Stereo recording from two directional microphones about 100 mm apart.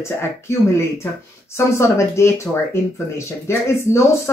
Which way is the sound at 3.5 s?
25° left (ahead or behind).